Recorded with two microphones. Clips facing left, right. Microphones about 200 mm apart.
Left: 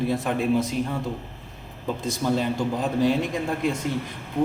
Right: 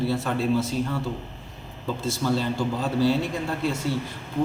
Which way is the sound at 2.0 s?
15° left (ahead or behind).